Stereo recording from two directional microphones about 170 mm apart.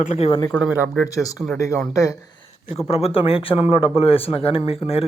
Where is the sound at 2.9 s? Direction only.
35° left (ahead or behind).